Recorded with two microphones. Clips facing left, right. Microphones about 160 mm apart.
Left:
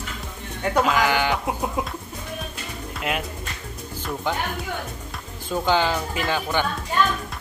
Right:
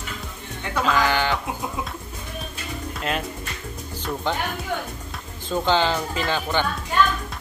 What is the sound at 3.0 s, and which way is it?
Speech, 10° left (ahead or behind).